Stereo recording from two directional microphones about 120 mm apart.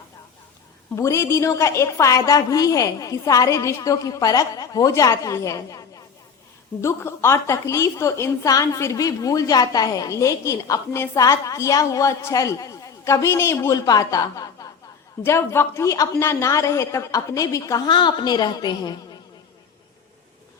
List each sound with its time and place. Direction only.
0.9 s a woman's voice: 25° left (ahead or behind)
6.8 s a woman's voice: 20° left (ahead or behind)